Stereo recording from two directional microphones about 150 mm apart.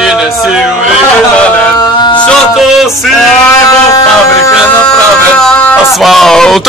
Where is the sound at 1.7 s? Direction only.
30° left (ahead or behind).